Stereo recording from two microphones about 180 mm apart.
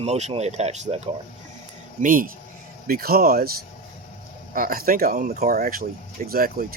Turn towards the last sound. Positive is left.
turn(degrees=-55)  # may be behind; listen again after turning